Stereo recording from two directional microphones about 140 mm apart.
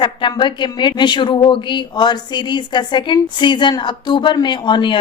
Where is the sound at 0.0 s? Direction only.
35° left (ahead or behind).